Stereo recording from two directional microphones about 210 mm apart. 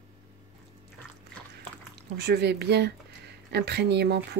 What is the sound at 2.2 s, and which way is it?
A woman's voice, 50° right (ahead or behind).